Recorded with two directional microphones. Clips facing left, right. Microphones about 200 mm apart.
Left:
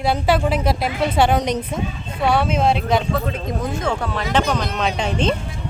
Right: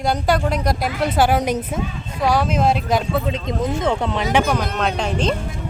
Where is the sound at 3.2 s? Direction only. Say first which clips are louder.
Right 2 dB; 20° right (ahead or behind); by 5.3 s centre (ahead or behind).